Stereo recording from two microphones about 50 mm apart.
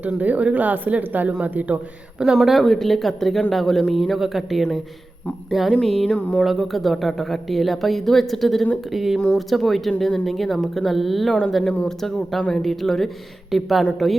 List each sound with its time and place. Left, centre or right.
0.2 s a woman's voice: right
2.3 s a woman's voice: centre
6.1 s music: left
6.4 s a woman's voice: centre
9.1 s a woman's voice: centre
11.3 s music: centre
11.9 s a woman's voice: centre
12.4 s speech: centre
12.6 s a woman's voice: centre